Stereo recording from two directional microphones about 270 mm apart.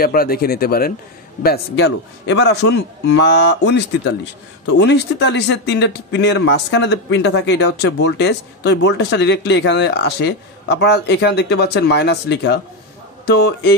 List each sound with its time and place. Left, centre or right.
0.0 s speech: left